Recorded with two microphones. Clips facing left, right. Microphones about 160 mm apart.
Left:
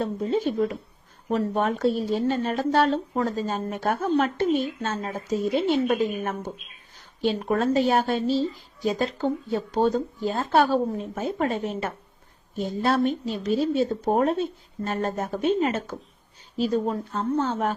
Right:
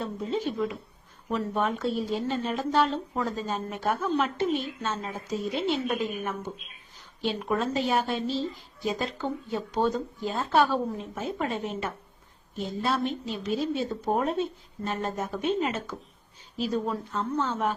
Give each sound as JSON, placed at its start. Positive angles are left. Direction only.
{"t": 0.0, "sound": "a woman's voice", "side_deg": 45}
{"t": 16.7, "sound": "a woman's voice", "side_deg": 35}